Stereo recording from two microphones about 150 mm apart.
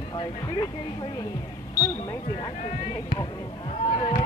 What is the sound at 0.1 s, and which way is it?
Speech, 30° left (ahead or behind).